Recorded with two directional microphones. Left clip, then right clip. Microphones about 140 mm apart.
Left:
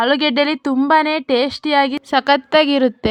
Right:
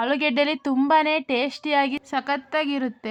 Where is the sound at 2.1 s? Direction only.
50° left (ahead or behind).